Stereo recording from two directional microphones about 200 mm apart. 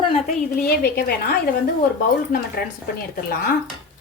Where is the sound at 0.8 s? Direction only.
50° left (ahead or behind).